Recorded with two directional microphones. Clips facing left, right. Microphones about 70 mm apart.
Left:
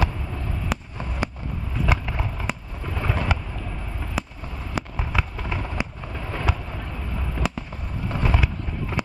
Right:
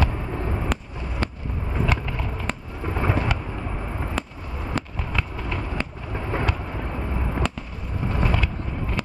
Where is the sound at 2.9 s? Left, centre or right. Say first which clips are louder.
Right 3 dB; right.